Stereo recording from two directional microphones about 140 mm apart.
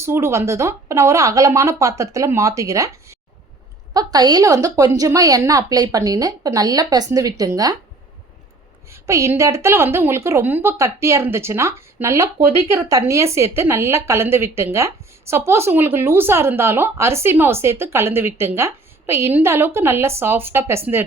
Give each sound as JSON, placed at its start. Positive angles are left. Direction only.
{"t": 0.0, "sound": "a woman's voice", "side_deg": -20}
{"t": 8.9, "sound": "a woman's voice", "side_deg": -20}